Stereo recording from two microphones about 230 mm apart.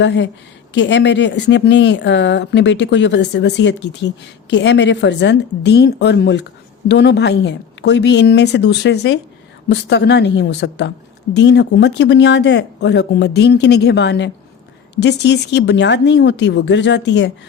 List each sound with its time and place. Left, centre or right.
0.0 s speech: left